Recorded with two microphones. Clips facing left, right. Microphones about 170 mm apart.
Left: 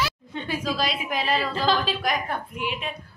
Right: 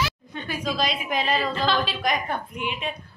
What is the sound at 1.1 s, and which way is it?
A woman's voice, 5° left (ahead or behind).